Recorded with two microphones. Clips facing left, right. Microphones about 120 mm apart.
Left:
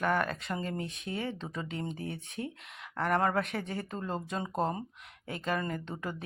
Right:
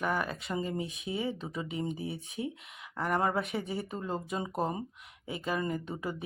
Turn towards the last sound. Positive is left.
turn(degrees=-10)  # may be behind; listen again after turning